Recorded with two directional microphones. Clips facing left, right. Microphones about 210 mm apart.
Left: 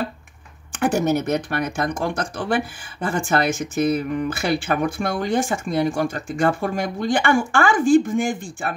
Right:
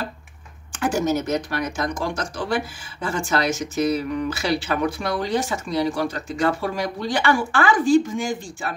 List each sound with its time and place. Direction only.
0.7 s speech: 60° left (ahead or behind)